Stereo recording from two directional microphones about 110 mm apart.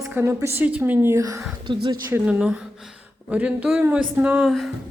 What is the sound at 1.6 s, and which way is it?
Speech, 45° right (ahead or behind).